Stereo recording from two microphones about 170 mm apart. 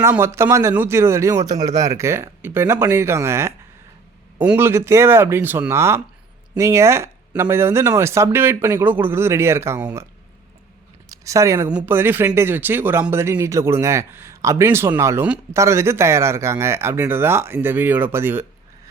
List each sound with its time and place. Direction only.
0.0 s speech: 15° right (ahead or behind)
11.1 s speech: 20° right (ahead or behind)